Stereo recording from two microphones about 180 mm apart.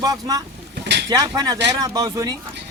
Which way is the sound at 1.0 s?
20° right (ahead or behind).